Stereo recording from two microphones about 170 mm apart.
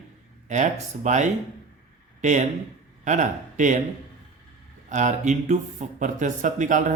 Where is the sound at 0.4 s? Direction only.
45° right (ahead or behind).